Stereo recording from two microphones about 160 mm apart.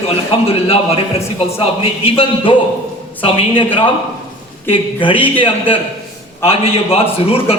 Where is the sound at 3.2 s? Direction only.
35° left (ahead or behind).